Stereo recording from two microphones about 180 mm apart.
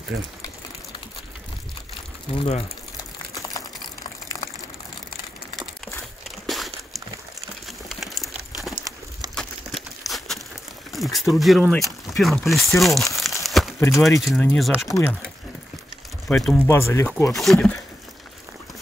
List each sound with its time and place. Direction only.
2.3 s a sound: 30° left (ahead or behind)
6.4 s a sound: centre (ahead or behind)
10.9 s speech: centre (ahead or behind)
13.4 s crumpling: centre (ahead or behind)
13.7 s speech: 15° left (ahead or behind)
14.9 s speech: 15° left (ahead or behind)
16.3 s speech: 5° left (ahead or behind)
17.3 s speech: centre (ahead or behind)